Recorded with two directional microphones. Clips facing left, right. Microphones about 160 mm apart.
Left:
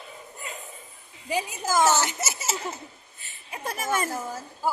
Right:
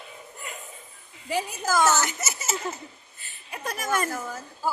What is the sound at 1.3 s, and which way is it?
A woman's voice, 15° left (ahead or behind).